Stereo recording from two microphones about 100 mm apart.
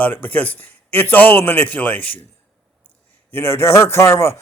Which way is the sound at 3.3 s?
20° left (ahead or behind).